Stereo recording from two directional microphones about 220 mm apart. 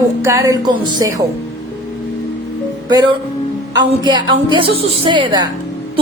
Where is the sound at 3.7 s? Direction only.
20° right (ahead or behind).